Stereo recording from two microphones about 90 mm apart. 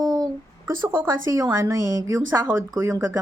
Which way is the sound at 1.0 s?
40° right (ahead or behind).